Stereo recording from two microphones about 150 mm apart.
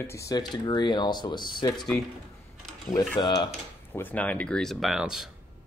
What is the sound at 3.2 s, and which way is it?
Speech, 30° left (ahead or behind).